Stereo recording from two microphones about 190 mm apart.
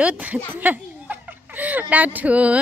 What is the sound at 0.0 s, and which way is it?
Speech, 10° right (ahead or behind).